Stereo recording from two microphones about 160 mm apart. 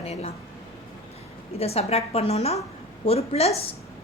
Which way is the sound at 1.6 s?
40° left (ahead or behind).